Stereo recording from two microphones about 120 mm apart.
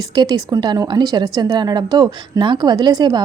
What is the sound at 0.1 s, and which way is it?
A woman's voice, 35° right (ahead or behind).